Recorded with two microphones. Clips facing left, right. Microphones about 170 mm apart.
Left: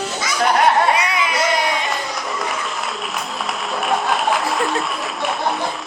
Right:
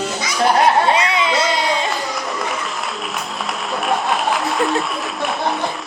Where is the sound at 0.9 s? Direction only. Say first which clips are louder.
Right 2 dB; 25° right (ahead or behind).